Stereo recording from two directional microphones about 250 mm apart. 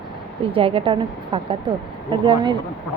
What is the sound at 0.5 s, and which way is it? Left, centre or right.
Speech, right.